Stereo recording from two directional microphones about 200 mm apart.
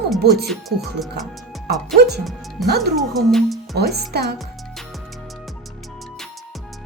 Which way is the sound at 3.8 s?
55° right (ahead or behind).